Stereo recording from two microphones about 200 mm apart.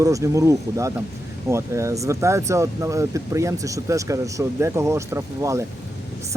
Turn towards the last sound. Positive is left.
turn(degrees=-15)  # may be behind; listen again after turning